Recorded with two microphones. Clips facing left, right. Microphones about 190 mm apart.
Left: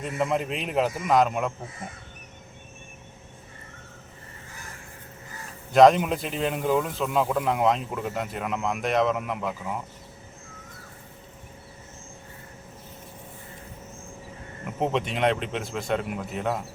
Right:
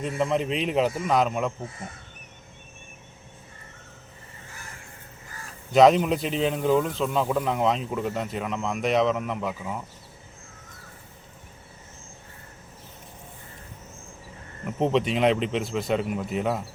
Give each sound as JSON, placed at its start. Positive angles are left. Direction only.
{"t": 0.0, "sound": "speech", "side_deg": 5}
{"t": 5.7, "sound": "speech", "side_deg": 0}
{"t": 14.8, "sound": "speech", "side_deg": 0}